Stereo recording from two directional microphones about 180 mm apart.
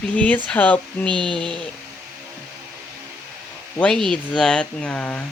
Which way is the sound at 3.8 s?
5° left (ahead or behind).